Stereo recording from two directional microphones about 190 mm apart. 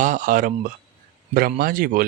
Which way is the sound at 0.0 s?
40° right (ahead or behind).